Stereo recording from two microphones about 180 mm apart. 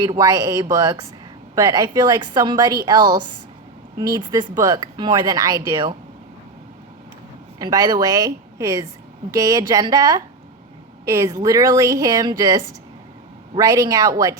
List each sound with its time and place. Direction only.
0.0 s speech: 20° right (ahead or behind)
7.6 s speech: 20° right (ahead or behind)